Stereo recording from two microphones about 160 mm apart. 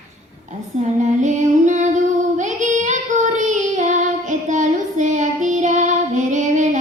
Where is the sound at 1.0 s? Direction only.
50° right (ahead or behind).